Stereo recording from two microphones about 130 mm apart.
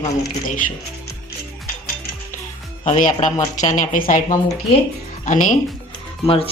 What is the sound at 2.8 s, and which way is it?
A woman's voice, 65° left (ahead or behind).